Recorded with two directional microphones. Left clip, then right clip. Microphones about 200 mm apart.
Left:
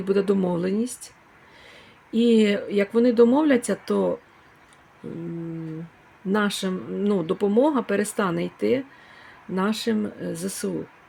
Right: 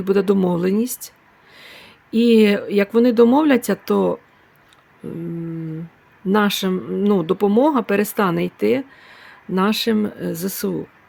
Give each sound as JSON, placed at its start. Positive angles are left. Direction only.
{"t": 0.0, "sound": "speech", "side_deg": -20}
{"t": 6.3, "sound": "speech", "side_deg": -20}